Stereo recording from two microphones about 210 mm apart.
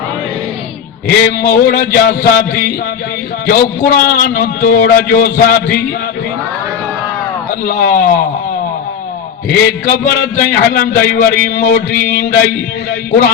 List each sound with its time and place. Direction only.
1.0 s speech: 45° left (ahead or behind)
7.6 s speech: 45° left (ahead or behind)
10.1 s speech: 50° left (ahead or behind)